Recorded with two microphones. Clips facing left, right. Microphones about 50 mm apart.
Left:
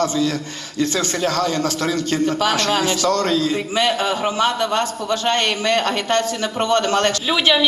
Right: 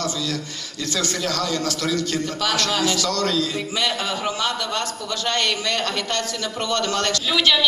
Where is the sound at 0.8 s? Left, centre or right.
Left.